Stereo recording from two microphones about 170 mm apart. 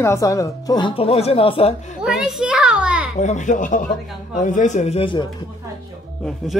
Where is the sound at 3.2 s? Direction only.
45° left (ahead or behind); by 5.3 s 30° left (ahead or behind).